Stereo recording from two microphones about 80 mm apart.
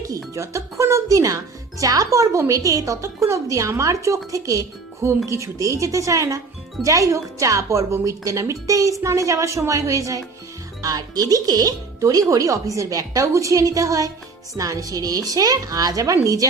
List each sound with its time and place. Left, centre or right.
0.1 s speech: right